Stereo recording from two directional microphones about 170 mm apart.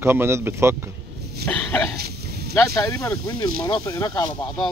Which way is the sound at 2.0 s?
65° right (ahead or behind).